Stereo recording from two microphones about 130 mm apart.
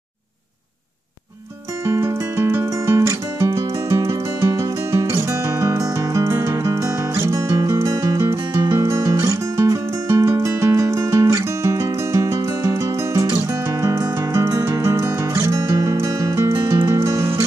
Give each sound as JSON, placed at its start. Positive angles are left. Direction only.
{"t": 1.9, "sound": "music", "side_deg": -20}